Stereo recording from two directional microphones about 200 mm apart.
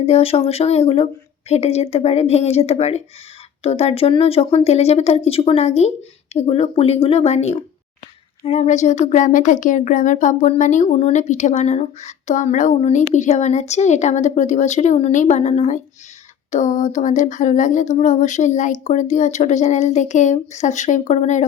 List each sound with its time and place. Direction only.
0.0 s speech: 30° left (ahead or behind)